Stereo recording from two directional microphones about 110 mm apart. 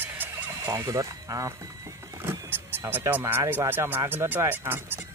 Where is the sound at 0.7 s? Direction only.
30° right (ahead or behind).